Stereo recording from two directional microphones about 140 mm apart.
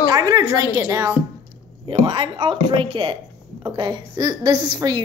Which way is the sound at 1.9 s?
35° right (ahead or behind).